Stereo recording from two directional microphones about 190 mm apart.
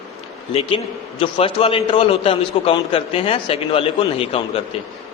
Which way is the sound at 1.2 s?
30° left (ahead or behind).